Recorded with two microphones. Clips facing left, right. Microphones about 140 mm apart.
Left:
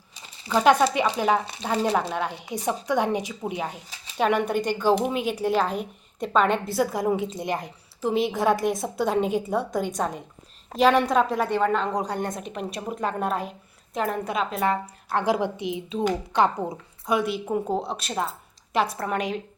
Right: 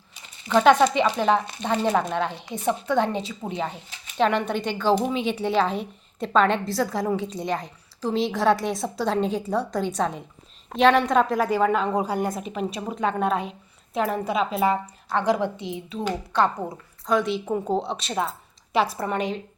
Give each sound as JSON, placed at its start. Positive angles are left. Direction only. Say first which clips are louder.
{"t": 0.5, "sound": "speech", "louder": "right 2 dB", "side_deg": 5}
{"t": 3.8, "sound": "speech", "louder": "even", "side_deg": 35}
{"t": 4.2, "sound": "a woman's voice", "louder": "even", "side_deg": 10}
{"t": 8.5, "sound": "a woman's voice", "louder": "left 3 dB", "side_deg": 50}
{"t": 9.0, "sound": "a woman's voice", "louder": "even", "side_deg": 5}
{"t": 15.1, "sound": "a woman's voice", "louder": "right 1 dB", "side_deg": 10}